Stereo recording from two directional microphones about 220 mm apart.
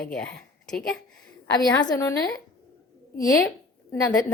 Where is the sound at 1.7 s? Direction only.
15° left (ahead or behind).